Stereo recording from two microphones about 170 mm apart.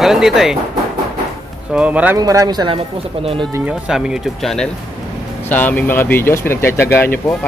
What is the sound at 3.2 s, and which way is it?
Speech, 5° right (ahead or behind).